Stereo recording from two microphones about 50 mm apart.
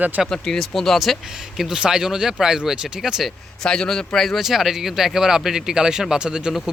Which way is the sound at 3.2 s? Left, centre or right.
Centre.